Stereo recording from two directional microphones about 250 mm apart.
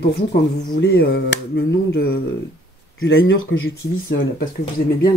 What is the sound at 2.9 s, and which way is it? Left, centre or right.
Speech, left.